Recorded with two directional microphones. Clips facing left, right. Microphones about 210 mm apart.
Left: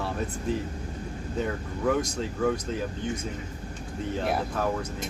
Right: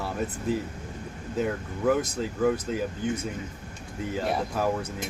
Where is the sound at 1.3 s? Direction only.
5° right (ahead or behind).